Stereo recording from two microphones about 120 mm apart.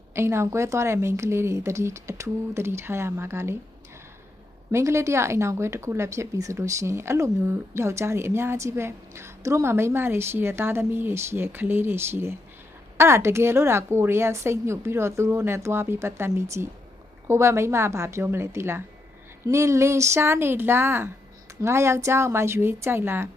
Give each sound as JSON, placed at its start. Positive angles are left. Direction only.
{"t": 0.1, "sound": "speech", "side_deg": -20}
{"t": 4.7, "sound": "speech", "side_deg": -25}